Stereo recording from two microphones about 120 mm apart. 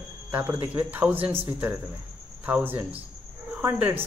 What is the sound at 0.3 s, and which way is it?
Speech, 15° right (ahead or behind).